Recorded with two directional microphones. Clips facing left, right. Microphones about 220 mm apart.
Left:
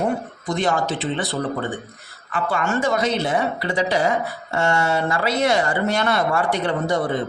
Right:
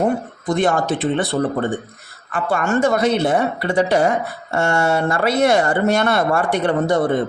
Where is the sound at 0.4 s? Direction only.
55° right (ahead or behind).